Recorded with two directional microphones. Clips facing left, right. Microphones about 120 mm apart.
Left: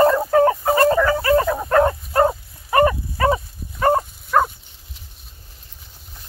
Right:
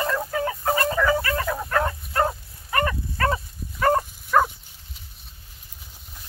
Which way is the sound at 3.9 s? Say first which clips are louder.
Left 2 dB; 5° left (ahead or behind).